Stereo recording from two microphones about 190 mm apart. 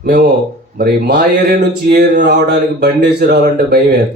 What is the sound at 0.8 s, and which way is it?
Speech, 55° right (ahead or behind).